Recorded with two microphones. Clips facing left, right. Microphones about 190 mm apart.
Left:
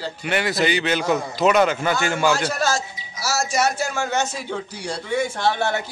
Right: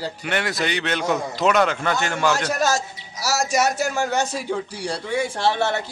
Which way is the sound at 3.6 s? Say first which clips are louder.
Right 1 dB; 40° right (ahead or behind).